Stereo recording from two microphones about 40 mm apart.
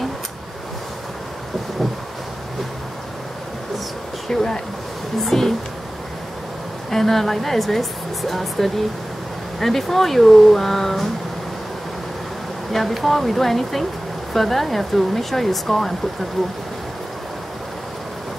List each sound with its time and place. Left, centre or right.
4.3 s a woman's voice: centre
6.9 s speech: centre
12.7 s speech: centre